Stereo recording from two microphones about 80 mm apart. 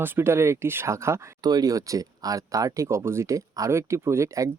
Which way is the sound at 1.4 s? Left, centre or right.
Right.